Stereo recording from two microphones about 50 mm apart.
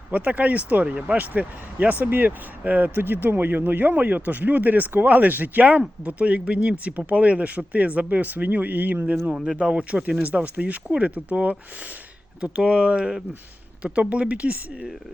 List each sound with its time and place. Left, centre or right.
0.1 s speech: right
1.1 s speech: right
9.6 s speech: right